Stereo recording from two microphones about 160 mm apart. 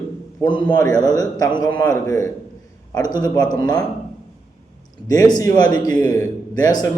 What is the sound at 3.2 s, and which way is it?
Speech, 25° left (ahead or behind).